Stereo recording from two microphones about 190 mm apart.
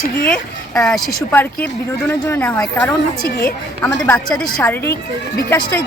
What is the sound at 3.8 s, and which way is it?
A woman's voice, 15° left (ahead or behind).